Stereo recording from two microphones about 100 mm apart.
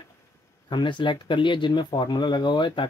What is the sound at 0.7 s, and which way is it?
Speech, 50° left (ahead or behind).